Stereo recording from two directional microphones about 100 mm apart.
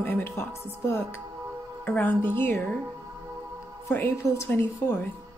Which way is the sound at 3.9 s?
20° left (ahead or behind).